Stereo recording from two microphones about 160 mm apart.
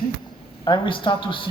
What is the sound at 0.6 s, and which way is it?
Speech, 30° left (ahead or behind).